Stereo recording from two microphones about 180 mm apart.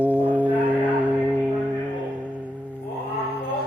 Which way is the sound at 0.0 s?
10° right (ahead or behind).